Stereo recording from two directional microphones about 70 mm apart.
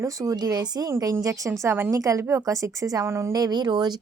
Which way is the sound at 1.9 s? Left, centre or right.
Right.